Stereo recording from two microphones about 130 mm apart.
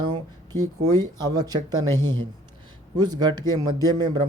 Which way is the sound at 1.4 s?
30° right (ahead or behind).